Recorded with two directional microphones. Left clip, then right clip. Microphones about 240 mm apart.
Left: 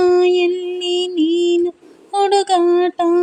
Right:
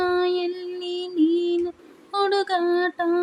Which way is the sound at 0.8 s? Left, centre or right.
Centre.